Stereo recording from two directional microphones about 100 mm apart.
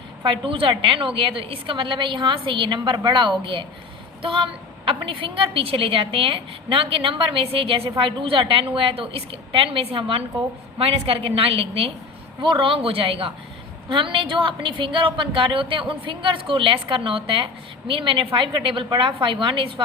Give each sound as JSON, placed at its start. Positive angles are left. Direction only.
{"t": 0.3, "sound": "a woman's voice", "side_deg": -60}
{"t": 10.8, "sound": "a woman's voice", "side_deg": -80}
{"t": 12.4, "sound": "a woman's voice", "side_deg": -55}